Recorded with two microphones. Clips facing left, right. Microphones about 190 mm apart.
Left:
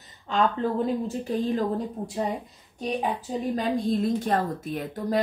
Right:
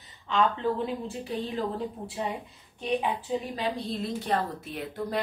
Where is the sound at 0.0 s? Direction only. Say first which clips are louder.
Left 1 dB; 45° left (ahead or behind).